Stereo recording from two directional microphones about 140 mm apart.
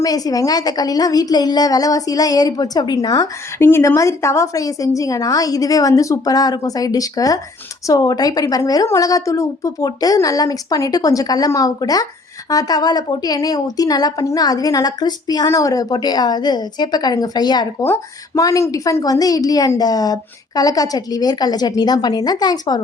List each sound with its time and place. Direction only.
0.0 s a woman's voice: 25° left (ahead or behind)
17.8 s a woman's voice: 20° left (ahead or behind)